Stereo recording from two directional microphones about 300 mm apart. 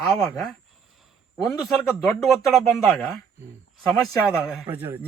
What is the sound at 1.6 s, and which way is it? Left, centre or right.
Speech, centre.